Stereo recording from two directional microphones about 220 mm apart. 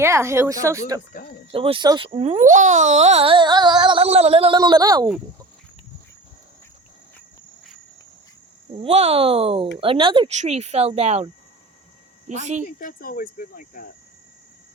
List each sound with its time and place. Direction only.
0.0 s a woman's voice: 10° right (ahead or behind)
8.7 s speech: 25° right (ahead or behind)
12.3 s speech: 30° right (ahead or behind)
12.6 s speech: 40° left (ahead or behind)